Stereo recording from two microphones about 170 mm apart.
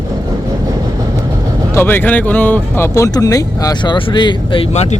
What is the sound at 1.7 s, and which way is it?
Speech, 15° left (ahead or behind).